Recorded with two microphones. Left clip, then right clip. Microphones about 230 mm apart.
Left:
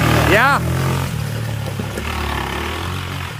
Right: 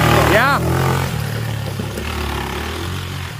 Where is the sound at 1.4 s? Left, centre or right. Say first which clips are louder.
Right 1 dB; centre.